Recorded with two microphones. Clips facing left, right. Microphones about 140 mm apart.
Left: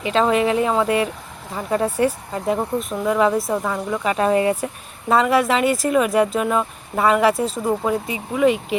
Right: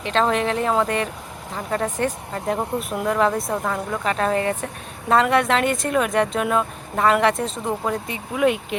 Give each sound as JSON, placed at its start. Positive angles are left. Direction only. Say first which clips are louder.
{"t": 0.0, "sound": "speech", "louder": "left 3 dB", "side_deg": 5}
{"t": 2.6, "sound": "speech", "louder": "left 2 dB", "side_deg": -5}